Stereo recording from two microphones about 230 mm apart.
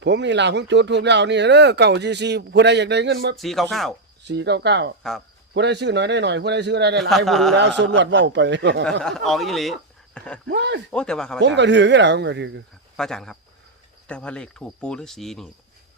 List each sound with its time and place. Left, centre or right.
0.0 s speech: right
3.3 s speech: centre
4.2 s speech: right
7.3 s speech: centre
7.5 s speech: right
8.8 s speech: centre
10.4 s speech: right
10.9 s speech: centre
11.3 s speech: right
13.0 s speech: centre